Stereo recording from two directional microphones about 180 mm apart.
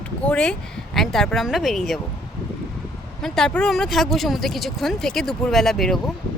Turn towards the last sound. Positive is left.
turn(degrees=0)  # may be behind; listen again after turning